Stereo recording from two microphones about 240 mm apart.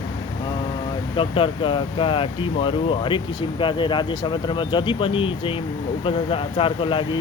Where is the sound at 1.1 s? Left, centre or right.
Left.